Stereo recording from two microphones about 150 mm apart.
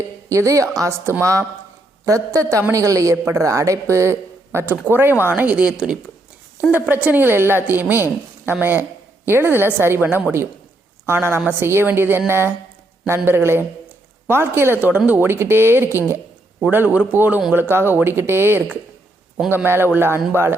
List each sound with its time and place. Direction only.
0.3 s a woman's voice: 20° right (ahead or behind)